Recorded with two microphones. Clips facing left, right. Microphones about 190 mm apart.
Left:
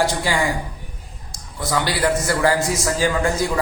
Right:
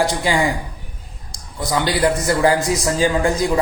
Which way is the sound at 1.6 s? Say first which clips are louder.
Right 3 dB; 20° right (ahead or behind).